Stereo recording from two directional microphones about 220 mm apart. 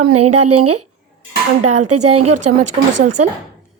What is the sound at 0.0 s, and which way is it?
A woman's voice, 90° right.